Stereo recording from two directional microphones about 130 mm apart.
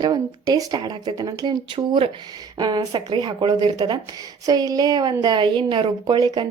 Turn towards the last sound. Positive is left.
turn(degrees=-40)  # may be behind; listen again after turning